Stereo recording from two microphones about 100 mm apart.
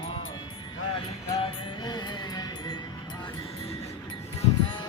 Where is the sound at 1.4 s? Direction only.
60° left (ahead or behind).